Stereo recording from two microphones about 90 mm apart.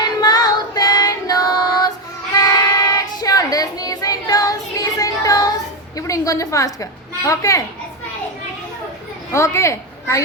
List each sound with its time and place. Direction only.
0.0 s female singing: 50° left (ahead or behind)
2.4 s child singing: 40° left (ahead or behind)
6.0 s a woman's voice: 35° left (ahead or behind)
9.3 s a woman's voice: 30° left (ahead or behind)